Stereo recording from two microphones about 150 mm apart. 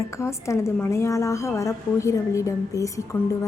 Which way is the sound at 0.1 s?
20° left (ahead or behind).